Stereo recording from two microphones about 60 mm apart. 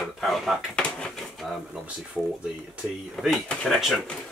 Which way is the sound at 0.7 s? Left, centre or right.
Centre.